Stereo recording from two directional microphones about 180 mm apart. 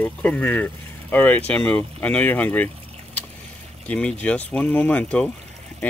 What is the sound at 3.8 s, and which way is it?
Speech, 5° left (ahead or behind).